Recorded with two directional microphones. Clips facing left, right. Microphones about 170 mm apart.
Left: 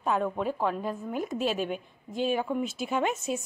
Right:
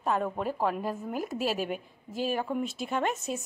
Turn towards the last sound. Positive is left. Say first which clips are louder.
# left 2 dB
turn(degrees=0)  # may be behind; listen again after turning